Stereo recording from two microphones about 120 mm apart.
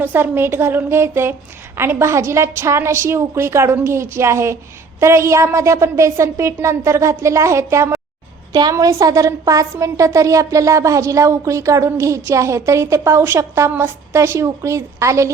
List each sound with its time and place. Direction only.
0.0 s a woman's voice: 15° right (ahead or behind)